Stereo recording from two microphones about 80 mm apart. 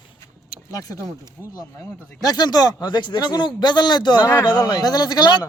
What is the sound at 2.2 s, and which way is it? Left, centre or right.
Speech, left.